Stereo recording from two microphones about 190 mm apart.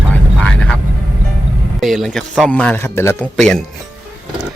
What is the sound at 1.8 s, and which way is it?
A man's voice, centre (ahead or behind).